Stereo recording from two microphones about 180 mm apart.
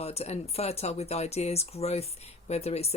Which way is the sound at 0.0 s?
35° left (ahead or behind).